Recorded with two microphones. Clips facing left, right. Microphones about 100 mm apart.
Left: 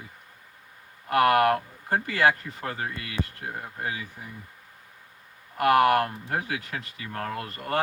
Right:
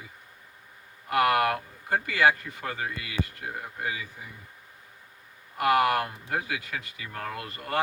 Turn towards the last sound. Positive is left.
turn(degrees=40)  # may be behind; listen again after turning